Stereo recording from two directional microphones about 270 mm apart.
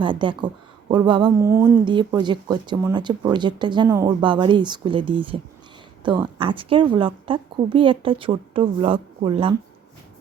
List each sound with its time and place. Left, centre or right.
0.0 s a woman's voice: centre